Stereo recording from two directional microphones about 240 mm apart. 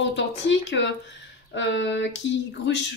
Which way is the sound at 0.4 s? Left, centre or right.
Left.